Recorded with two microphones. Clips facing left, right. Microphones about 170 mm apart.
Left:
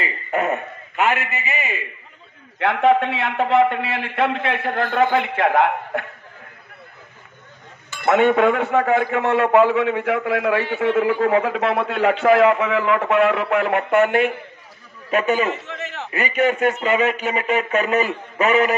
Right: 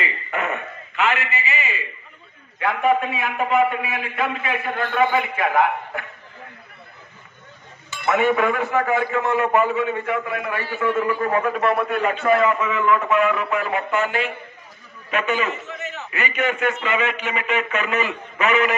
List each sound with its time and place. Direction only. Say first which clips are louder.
0.0 s a sound: left 4 dB; 40° left (ahead or behind)
2.6 s a man's voice: left 3 dB; 75° left (ahead or behind)
8.1 s a man's voice: left 4 dB; 65° left (ahead or behind)
15.0 s a man's voice: left 4 dB; 40° left (ahead or behind)
15.7 s a sound: left 2 dB; 90° left
16.1 s a man's voice: left 5 dB; 40° left (ahead or behind)